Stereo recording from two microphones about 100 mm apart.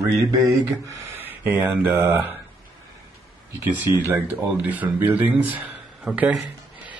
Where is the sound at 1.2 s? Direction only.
20° right (ahead or behind).